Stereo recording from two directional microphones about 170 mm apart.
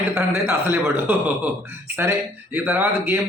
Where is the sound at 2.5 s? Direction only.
15° right (ahead or behind).